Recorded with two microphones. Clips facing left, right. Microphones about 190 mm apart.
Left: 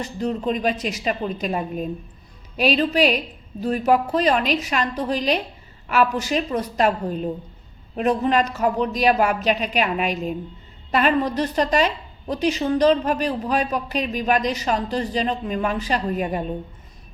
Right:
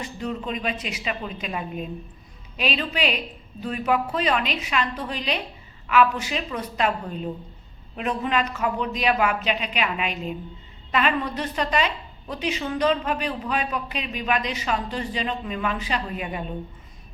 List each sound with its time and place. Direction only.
0.0 s speech: 35° left (ahead or behind)